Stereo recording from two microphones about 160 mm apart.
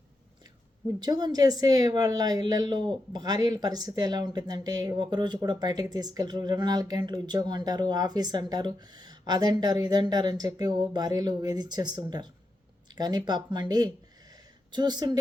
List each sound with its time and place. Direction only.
0.9 s a woman's voice: 25° right (ahead or behind)